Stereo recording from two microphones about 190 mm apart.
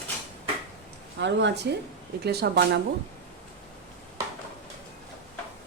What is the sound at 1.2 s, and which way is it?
Speech, 70° right (ahead or behind).